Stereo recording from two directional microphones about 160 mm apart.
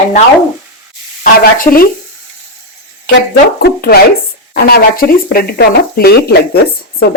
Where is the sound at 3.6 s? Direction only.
75° left (ahead or behind).